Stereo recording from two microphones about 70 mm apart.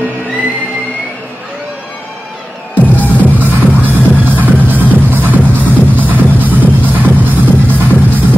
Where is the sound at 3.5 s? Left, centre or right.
Right.